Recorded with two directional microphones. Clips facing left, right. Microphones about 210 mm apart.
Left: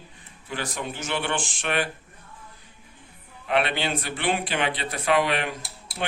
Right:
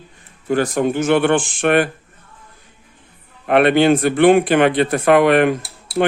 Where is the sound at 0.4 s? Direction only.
45° right (ahead or behind).